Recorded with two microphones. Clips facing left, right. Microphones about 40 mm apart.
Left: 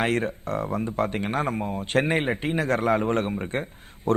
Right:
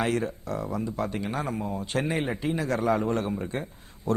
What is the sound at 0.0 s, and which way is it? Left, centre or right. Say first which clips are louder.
Speech: left 3 dB; left.